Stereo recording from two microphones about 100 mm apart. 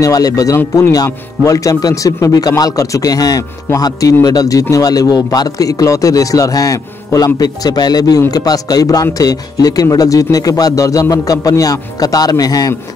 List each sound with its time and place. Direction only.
0.0 s speech: 35° left (ahead or behind)